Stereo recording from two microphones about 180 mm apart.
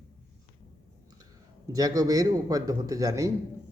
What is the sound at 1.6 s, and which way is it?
Speech, 20° right (ahead or behind).